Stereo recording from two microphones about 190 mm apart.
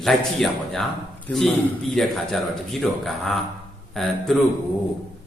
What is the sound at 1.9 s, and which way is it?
A man's voice, centre (ahead or behind).